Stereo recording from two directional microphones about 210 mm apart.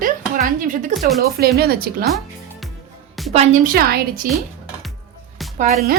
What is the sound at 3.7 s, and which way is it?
Speech, 50° right (ahead or behind).